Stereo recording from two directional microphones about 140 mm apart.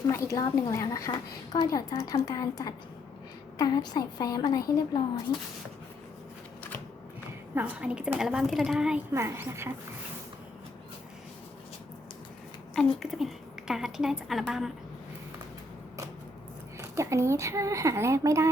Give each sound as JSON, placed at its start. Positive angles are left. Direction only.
{"t": 0.1, "sound": "a woman's voice", "side_deg": 20}
{"t": 7.5, "sound": "a woman's voice", "side_deg": -10}
{"t": 9.1, "sound": "speech", "side_deg": -20}
{"t": 12.7, "sound": "a woman's voice", "side_deg": 0}
{"t": 16.7, "sound": "speech", "side_deg": -20}